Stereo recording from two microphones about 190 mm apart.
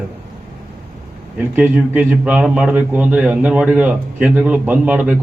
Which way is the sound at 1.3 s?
10° right (ahead or behind).